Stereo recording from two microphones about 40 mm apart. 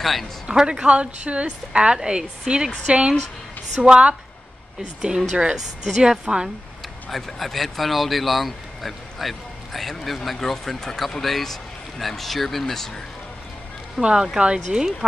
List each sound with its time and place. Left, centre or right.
0.0 s speech: centre
0.5 s a woman's voice: right
7.1 s speech: centre
13.9 s a woman's voice: centre